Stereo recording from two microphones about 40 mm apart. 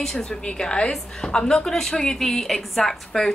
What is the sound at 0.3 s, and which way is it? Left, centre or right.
A woman's voice, left.